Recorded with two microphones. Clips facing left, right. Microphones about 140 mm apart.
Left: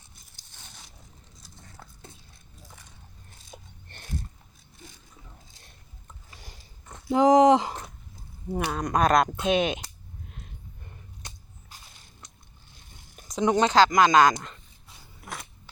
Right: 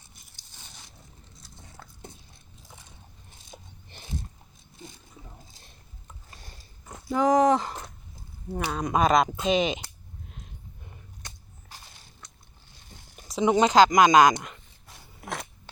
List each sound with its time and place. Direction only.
1.6 s a sound: 10° right (ahead or behind)
3.5 s a sound: 5° right (ahead or behind)
7.1 s speech: 20° left (ahead or behind)
8.6 s speech: centre (ahead or behind)
13.1 s speech: 5° right (ahead or behind)
15.2 s scissors: 85° right